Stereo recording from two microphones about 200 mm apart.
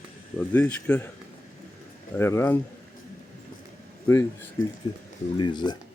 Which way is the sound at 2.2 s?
10° left (ahead or behind).